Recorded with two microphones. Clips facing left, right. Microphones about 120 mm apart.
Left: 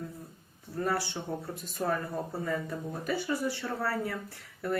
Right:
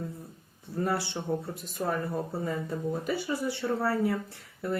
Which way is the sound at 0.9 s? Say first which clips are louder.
Even; 20° right (ahead or behind).